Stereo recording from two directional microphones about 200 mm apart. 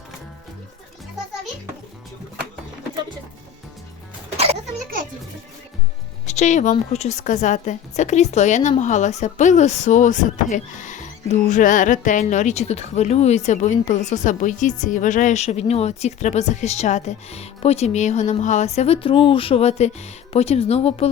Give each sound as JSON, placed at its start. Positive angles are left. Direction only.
{"t": 6.2, "sound": "speech", "side_deg": 35}